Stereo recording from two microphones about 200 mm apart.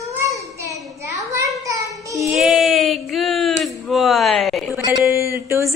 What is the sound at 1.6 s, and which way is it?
Child singing, 15° right (ahead or behind).